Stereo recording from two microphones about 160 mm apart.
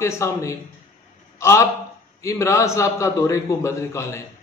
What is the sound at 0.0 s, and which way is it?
A man's voice, 15° left (ahead or behind).